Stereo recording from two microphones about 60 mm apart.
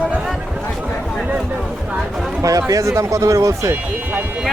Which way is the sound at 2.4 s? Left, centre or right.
Right.